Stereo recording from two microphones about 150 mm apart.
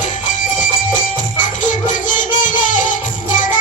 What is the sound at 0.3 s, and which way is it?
Music, 60° left (ahead or behind).